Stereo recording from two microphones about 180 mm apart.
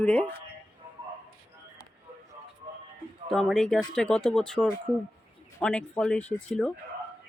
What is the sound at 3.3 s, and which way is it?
Speech, centre (ahead or behind).